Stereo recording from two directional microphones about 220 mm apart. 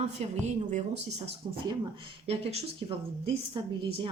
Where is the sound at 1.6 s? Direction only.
20° right (ahead or behind).